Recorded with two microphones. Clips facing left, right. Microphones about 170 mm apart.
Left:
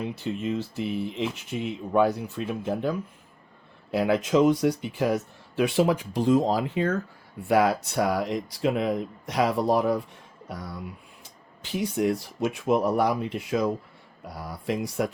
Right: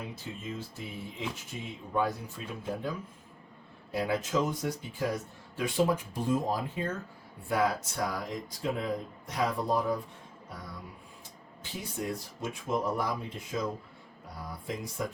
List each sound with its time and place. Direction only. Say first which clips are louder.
0.0 s speech: left 10 dB; 75° left (ahead or behind)
3.9 s speech: left 8 dB; 75° left (ahead or behind)